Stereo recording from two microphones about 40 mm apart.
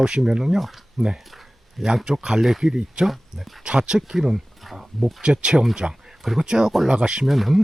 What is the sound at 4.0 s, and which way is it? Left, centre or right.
Speech, centre.